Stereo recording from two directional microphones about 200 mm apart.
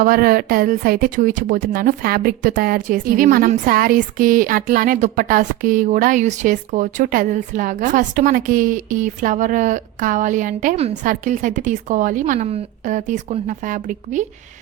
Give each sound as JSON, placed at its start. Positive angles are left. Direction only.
{"t": 0.0, "sound": "a woman's voice", "side_deg": -45}